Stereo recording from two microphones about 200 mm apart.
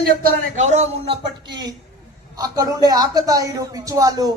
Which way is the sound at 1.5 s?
20° right (ahead or behind).